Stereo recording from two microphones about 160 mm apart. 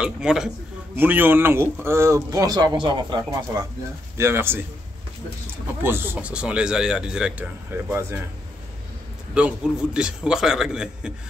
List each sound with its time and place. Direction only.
0.0 s a man's voice: 5° right (ahead or behind)
5.8 s speech: 15° right (ahead or behind)
9.3 s a man's voice: 5° right (ahead or behind)